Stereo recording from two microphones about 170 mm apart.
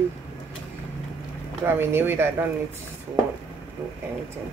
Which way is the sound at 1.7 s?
15° right (ahead or behind).